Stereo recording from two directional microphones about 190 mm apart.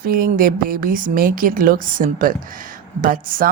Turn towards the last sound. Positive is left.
turn(degrees=-50)  # may be behind; listen again after turning